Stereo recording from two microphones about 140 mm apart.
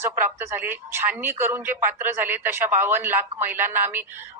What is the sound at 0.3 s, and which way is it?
Speech, 15° right (ahead or behind).